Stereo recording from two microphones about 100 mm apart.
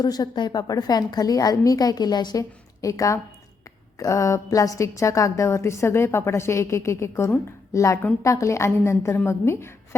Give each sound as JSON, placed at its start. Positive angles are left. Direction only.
{"t": 0.0, "sound": "a woman's voice", "side_deg": 40}